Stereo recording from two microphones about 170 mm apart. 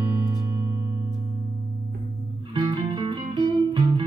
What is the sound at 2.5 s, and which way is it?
Music, 25° right (ahead or behind).